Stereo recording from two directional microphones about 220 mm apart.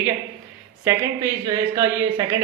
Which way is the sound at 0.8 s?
15° right (ahead or behind).